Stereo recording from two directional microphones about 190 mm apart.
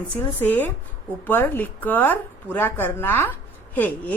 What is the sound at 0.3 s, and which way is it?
A woman's voice, 10° left (ahead or behind).